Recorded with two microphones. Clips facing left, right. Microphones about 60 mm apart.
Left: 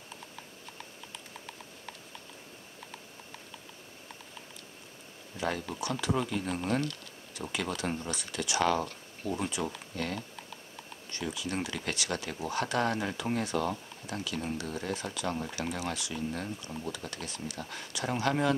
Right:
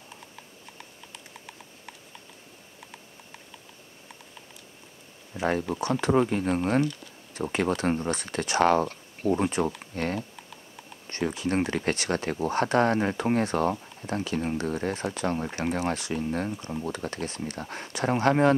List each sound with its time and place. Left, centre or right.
1.1 s clip-clop: centre
5.4 s speech: right